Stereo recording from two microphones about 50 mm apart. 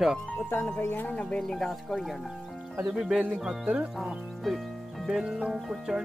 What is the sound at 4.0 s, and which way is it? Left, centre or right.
Speech, centre.